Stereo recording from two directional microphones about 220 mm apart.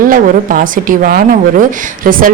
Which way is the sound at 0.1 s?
40° right (ahead or behind).